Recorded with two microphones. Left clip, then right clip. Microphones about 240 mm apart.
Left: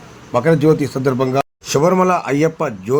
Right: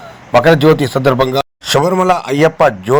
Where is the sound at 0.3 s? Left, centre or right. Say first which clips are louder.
Right 5 dB; centre.